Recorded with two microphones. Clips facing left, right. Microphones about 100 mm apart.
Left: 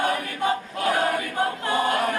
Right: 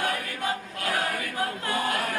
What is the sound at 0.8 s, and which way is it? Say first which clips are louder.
Choir: left 6 dB; 30° left (ahead or behind).